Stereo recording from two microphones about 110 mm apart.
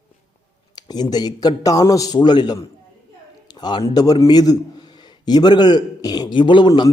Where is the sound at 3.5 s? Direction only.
40° left (ahead or behind).